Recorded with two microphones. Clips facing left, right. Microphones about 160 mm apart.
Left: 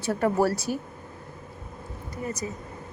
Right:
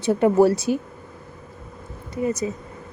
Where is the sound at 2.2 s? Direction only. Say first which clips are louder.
Right 9 dB; 25° right (ahead or behind).